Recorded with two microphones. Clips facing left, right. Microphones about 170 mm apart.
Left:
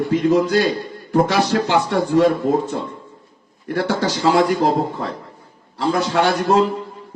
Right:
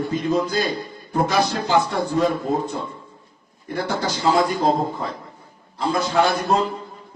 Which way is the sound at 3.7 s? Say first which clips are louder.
Left 4 dB; 85° left.